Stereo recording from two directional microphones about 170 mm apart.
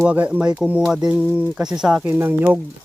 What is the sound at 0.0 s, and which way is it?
Speech, 10° right (ahead or behind).